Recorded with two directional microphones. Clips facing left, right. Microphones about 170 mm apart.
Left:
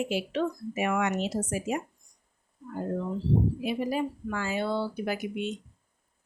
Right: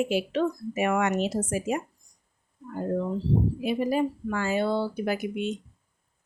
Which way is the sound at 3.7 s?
45° right (ahead or behind).